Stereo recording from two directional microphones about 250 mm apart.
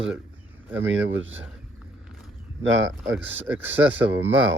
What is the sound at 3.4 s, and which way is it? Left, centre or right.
Speech, centre.